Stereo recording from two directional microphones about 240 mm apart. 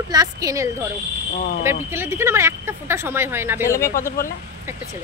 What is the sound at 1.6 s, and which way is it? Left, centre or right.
A woman's voice, centre.